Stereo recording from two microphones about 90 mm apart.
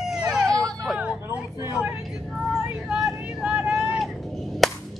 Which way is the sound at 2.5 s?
5° right (ahead or behind).